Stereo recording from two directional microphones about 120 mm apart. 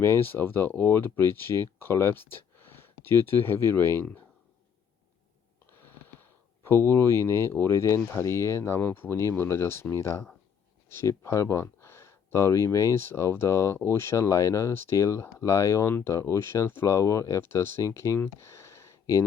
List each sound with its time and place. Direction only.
0.0 s speech: 20° left (ahead or behind)
5.7 s a sound: 20° left (ahead or behind)
6.7 s speech: 20° left (ahead or behind)